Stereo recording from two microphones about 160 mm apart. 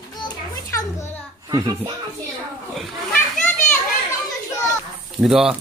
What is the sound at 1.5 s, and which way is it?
Speech, 20° right (ahead or behind).